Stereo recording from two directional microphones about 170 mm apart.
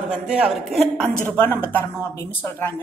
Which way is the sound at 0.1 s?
5° right (ahead or behind).